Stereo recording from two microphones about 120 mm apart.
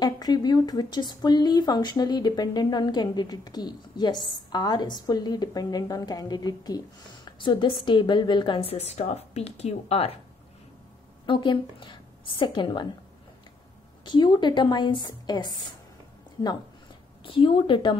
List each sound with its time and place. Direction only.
0.0 s a woman's voice: 35° left (ahead or behind); by 10.1 s 55° left (ahead or behind)
11.2 s a woman's voice: 40° left (ahead or behind)
14.0 s a woman's voice: 40° left (ahead or behind)
17.2 s a woman's voice: 45° left (ahead or behind)